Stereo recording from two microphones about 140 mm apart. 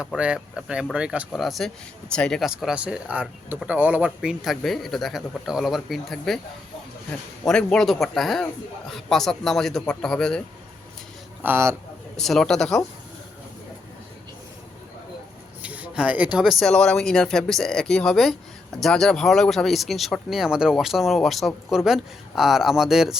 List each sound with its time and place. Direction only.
0.0 s speech: 5° right (ahead or behind)
7.4 s speech: 5° left (ahead or behind)
11.4 s speech: 15° right (ahead or behind)
12.1 s speech: centre (ahead or behind)
15.6 s speech: 10° right (ahead or behind)